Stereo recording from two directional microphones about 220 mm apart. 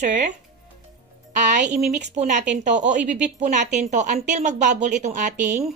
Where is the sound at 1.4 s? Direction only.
35° right (ahead or behind).